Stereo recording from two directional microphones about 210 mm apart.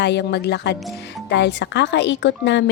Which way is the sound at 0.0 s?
55° left (ahead or behind).